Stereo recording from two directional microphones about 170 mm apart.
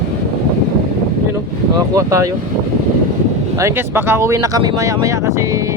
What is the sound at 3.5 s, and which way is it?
Speech, 15° right (ahead or behind).